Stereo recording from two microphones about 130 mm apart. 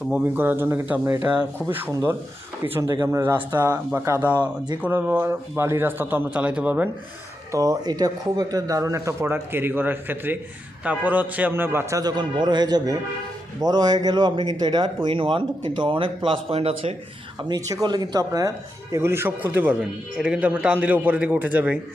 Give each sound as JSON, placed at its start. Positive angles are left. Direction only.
{"t": 0.1, "sound": "a man's voice", "side_deg": -15}
{"t": 7.5, "sound": "speech", "side_deg": -25}
{"t": 17.8, "sound": "a man's voice", "side_deg": -30}